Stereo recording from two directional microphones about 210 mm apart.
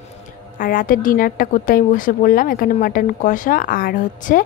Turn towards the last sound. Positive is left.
turn(degrees=40)  # may be behind; listen again after turning